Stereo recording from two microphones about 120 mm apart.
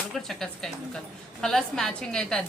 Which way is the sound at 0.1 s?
Centre (ahead or behind).